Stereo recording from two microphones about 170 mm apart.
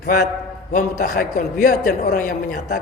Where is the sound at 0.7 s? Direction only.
55° left (ahead or behind).